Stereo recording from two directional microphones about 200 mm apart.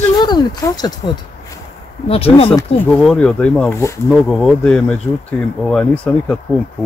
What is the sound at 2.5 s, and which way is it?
Speech, 10° left (ahead or behind).